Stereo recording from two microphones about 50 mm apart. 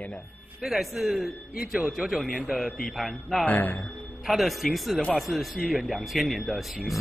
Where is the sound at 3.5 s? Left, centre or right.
Left.